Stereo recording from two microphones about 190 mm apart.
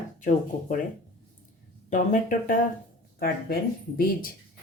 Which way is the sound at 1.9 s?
40° left (ahead or behind).